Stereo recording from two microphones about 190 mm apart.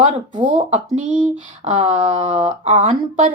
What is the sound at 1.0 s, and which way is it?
Speech, 5° right (ahead or behind).